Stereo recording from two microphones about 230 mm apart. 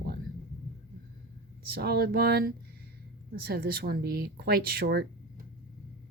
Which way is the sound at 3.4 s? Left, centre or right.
Right.